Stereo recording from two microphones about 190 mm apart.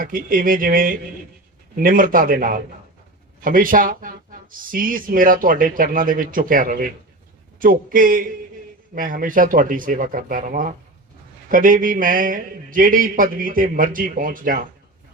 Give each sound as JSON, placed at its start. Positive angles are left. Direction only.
{"t": 0.0, "sound": "a man's voice", "side_deg": -50}